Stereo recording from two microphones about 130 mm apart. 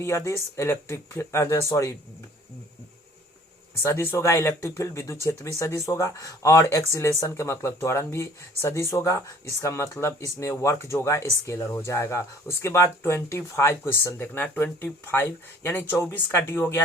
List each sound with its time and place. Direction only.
0.0 s speech: 20° left (ahead or behind)
3.8 s speech: 20° left (ahead or behind)